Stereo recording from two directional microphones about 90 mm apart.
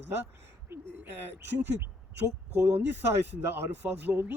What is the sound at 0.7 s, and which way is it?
Speech, 25° right (ahead or behind).